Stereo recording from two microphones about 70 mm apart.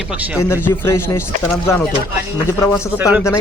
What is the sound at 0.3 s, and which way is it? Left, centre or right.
Speech, left.